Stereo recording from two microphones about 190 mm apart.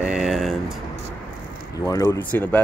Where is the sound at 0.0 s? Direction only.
5° right (ahead or behind).